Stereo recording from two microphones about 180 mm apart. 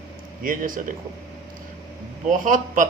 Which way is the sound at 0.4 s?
50° right (ahead or behind).